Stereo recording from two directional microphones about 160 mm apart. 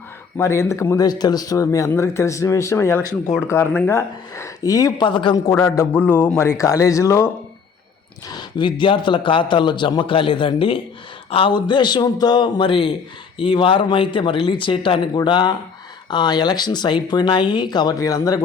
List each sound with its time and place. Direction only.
0.3 s speech: 15° left (ahead or behind)
8.3 s a man's voice: 30° left (ahead or behind)